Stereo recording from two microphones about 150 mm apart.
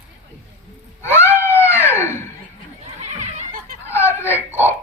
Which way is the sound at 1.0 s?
15° left (ahead or behind).